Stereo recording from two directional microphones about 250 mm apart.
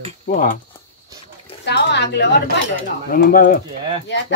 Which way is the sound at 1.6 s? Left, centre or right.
Left.